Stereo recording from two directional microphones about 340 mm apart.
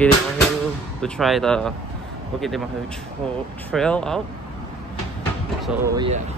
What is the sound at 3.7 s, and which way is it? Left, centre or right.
Speech, centre.